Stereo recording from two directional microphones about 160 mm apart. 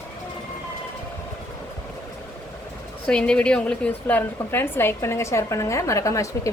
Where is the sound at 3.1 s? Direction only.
5° left (ahead or behind).